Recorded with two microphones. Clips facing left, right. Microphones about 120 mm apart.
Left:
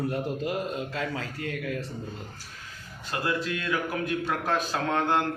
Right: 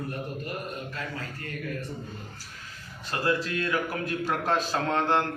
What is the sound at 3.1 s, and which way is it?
A man's voice, 10° left (ahead or behind).